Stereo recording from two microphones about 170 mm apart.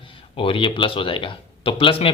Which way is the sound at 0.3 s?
30° left (ahead or behind).